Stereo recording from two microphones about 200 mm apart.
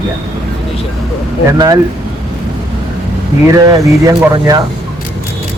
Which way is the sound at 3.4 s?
15° right (ahead or behind).